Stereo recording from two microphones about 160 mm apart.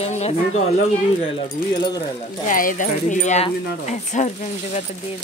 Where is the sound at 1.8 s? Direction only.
25° left (ahead or behind).